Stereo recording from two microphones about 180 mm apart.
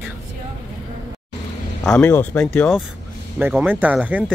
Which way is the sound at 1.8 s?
10° left (ahead or behind).